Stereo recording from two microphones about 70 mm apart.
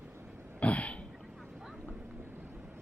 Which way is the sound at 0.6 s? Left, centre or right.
Centre.